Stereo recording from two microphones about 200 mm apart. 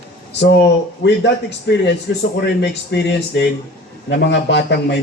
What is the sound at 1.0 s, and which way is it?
A man's voice, 60° left (ahead or behind).